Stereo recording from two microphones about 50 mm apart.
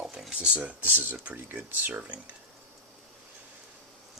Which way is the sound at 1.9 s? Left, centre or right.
Right.